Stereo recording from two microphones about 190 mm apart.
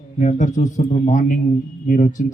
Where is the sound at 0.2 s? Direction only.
40° left (ahead or behind).